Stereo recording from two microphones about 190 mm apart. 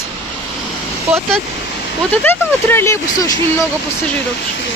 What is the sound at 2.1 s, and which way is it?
Speech, 10° left (ahead or behind).